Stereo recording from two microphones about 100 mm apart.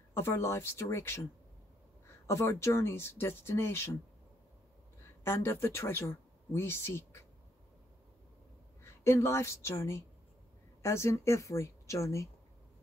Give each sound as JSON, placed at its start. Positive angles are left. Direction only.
{"t": 0.1, "sound": "speech", "side_deg": 25}
{"t": 2.2, "sound": "speech", "side_deg": 30}
{"t": 5.2, "sound": "speech", "side_deg": 25}
{"t": 8.8, "sound": "a woman's voice", "side_deg": 25}